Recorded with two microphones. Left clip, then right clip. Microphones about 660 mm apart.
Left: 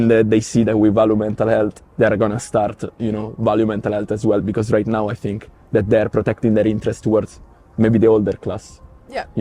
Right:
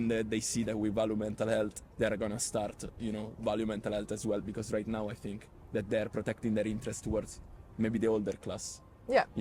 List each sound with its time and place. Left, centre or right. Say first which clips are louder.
0.0 s speech: left 19 dB; left
9.0 s speech: left 1 dB; right